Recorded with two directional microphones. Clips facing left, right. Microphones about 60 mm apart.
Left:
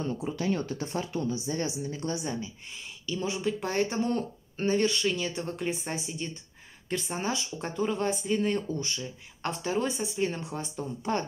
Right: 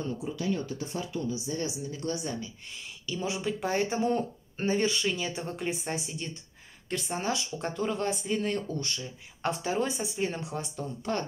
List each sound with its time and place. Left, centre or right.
0.2 s speech: left
3.1 s speech: centre
11.1 s speech: centre